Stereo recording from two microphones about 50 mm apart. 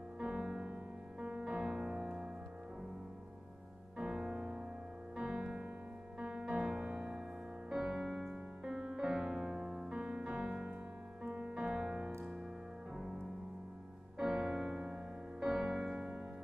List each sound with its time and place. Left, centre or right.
0.2 s music: centre
4.0 s music: centre
7.7 s music: centre
14.1 s music: centre